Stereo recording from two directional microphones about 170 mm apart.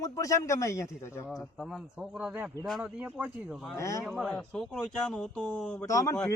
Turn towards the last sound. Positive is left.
turn(degrees=20)  # may be behind; listen again after turning